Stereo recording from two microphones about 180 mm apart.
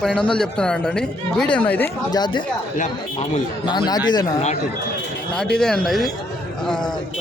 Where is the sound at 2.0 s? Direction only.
25° left (ahead or behind).